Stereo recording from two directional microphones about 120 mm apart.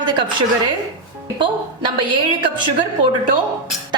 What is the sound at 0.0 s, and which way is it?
Speech, 40° right (ahead or behind).